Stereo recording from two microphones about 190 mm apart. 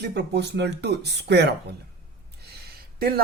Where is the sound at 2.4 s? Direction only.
55° right (ahead or behind).